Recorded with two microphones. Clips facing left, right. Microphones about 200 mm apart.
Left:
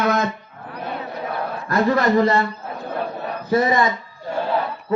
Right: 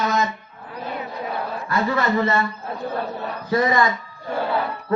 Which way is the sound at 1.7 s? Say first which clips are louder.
Left 4 dB; 40° left (ahead or behind).